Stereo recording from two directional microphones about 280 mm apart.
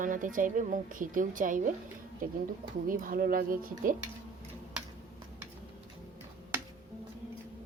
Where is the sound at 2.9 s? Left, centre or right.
Right.